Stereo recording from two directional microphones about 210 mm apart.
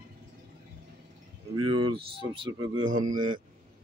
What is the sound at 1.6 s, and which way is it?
Speech, 20° right (ahead or behind).